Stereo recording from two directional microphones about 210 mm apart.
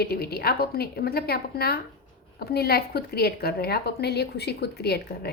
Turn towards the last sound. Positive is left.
turn(degrees=50)  # may be behind; listen again after turning